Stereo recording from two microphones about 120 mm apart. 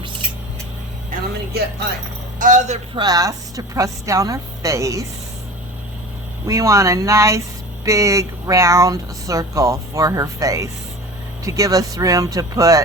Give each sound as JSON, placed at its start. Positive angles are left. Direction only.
{"t": 2.4, "sound": "a man's voice", "side_deg": -90}
{"t": 2.9, "sound": "speech", "side_deg": -35}
{"t": 6.5, "sound": "speech", "side_deg": -25}